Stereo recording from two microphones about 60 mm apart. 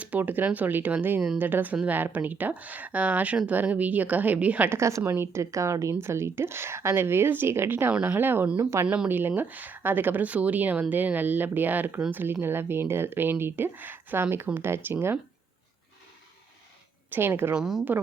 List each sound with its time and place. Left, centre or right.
0.0 s speech: right
4.7 s speech: right
5.1 s speech: right
5.4 s speech: right
8.5 s speech: right
9.0 s speech: right
17.1 s speech: right
17.5 s speech: centre